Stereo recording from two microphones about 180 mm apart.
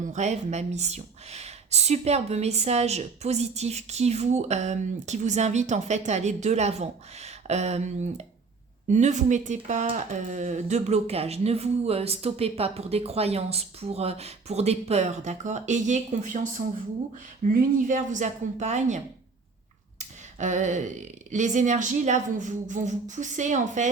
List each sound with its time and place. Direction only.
0.0 s speech: 40° right (ahead or behind)